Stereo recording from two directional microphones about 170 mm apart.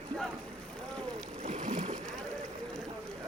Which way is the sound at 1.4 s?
45° right (ahead or behind).